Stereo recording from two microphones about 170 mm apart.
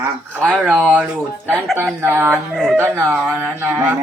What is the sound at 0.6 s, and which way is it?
Speech, 10° right (ahead or behind).